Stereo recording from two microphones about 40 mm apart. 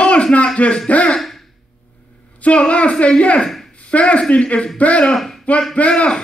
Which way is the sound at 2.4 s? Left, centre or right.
Left.